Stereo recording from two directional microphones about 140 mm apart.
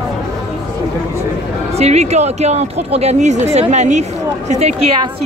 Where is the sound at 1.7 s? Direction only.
50° right (ahead or behind).